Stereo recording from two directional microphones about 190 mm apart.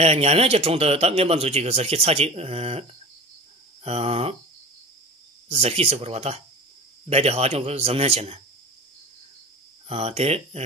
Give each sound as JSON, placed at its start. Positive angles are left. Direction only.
{"t": 0.0, "sound": "speech", "side_deg": -35}
{"t": 3.8, "sound": "speech", "side_deg": -30}
{"t": 5.5, "sound": "speech", "side_deg": -30}
{"t": 9.8, "sound": "speech", "side_deg": -30}